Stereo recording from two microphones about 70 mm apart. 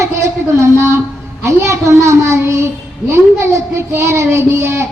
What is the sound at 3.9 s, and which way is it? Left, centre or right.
Child singing, right.